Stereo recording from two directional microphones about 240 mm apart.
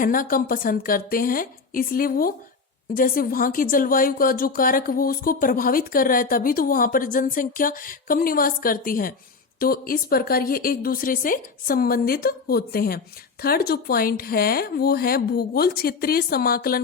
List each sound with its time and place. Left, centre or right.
0.0 s a woman's voice: left